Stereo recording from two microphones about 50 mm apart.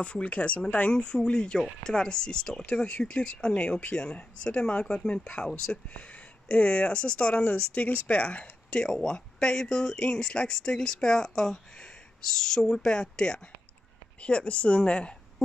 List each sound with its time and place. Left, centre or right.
0.0 s speech: left
6.5 s a woman's voice: left